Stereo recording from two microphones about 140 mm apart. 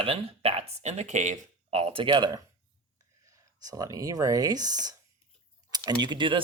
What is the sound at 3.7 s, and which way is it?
Speech, 25° right (ahead or behind).